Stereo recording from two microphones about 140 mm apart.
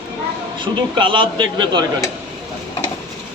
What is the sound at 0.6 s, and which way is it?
A man's voice, 35° right (ahead or behind).